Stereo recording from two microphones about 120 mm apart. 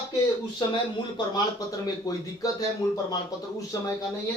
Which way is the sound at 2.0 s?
30° left (ahead or behind).